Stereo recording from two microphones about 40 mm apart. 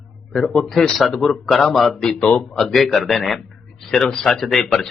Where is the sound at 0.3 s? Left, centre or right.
Centre.